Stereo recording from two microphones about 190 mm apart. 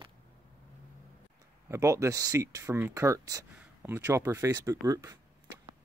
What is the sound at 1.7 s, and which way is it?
Speech, 15° right (ahead or behind).